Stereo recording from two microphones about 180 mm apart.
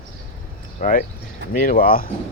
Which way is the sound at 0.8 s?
50° left (ahead or behind).